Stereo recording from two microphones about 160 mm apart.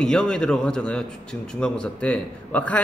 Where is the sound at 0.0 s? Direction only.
5° left (ahead or behind).